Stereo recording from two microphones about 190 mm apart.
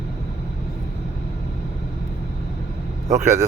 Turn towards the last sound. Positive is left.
turn(degrees=-40)  # may be behind; listen again after turning